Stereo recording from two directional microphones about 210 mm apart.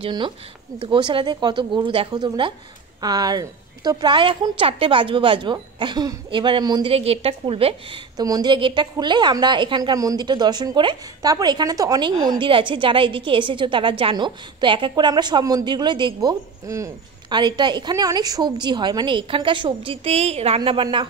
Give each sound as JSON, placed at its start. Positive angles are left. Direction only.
{"t": 0.0, "sound": "a woman's voice", "side_deg": -25}